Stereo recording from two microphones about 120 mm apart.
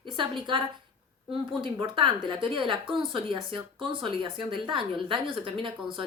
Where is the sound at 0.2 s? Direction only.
45° right (ahead or behind).